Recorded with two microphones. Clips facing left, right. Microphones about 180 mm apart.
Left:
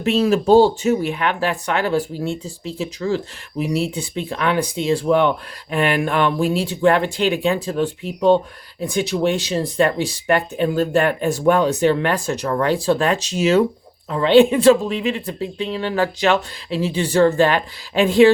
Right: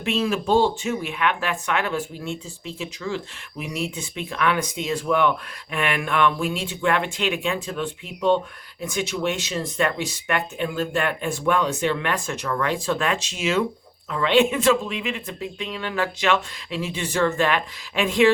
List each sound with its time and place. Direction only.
0.0 s speech: 40° left (ahead or behind)